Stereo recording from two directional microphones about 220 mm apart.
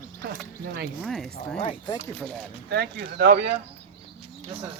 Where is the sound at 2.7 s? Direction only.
45° right (ahead or behind).